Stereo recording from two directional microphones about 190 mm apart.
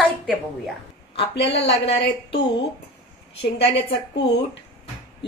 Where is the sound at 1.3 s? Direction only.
70° left (ahead or behind).